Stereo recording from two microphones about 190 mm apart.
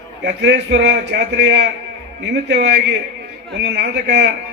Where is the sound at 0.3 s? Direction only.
65° right (ahead or behind).